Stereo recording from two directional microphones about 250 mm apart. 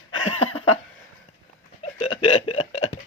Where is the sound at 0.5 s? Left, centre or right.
Left.